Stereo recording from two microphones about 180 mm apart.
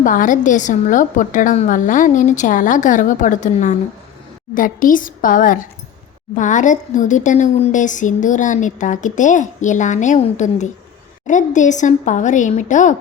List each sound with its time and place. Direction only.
0.0 s a woman's voice: 45° left (ahead or behind)